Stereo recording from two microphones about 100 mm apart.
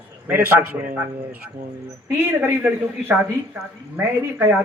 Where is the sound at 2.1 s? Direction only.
20° right (ahead or behind).